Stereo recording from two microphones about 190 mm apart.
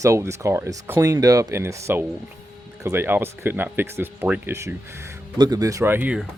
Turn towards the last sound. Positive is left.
turn(degrees=-10)  # may be behind; listen again after turning